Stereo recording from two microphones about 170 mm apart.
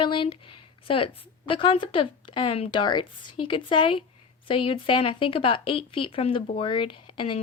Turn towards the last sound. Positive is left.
turn(degrees=30)  # may be behind; listen again after turning